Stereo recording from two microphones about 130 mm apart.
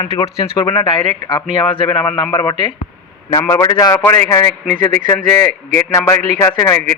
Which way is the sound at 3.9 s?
10° left (ahead or behind).